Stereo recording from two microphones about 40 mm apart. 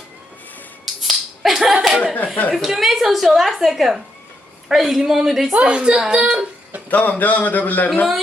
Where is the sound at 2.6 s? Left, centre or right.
Centre.